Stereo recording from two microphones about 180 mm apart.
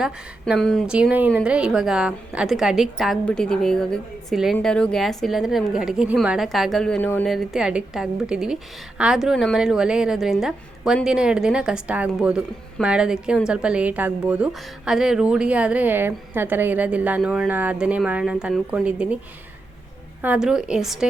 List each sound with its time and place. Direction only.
0.0 s a woman's voice: 5° right (ahead or behind)
7.3 s a woman's voice: centre (ahead or behind)
20.2 s a woman's voice: 5° right (ahead or behind)